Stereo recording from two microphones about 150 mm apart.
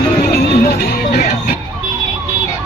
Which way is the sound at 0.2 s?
80° left.